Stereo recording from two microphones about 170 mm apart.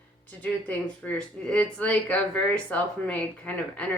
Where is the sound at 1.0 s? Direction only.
5° left (ahead or behind).